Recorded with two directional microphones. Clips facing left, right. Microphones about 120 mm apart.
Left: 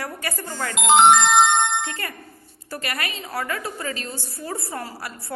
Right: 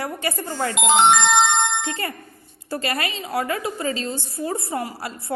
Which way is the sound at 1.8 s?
25° right (ahead or behind).